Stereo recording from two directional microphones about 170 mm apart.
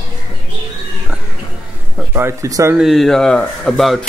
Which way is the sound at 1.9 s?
15° right (ahead or behind).